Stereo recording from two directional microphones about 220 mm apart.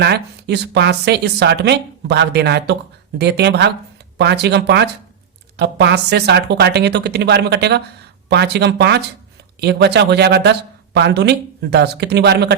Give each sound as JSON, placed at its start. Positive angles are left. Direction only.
{"t": 0.0, "sound": "speech", "side_deg": -50}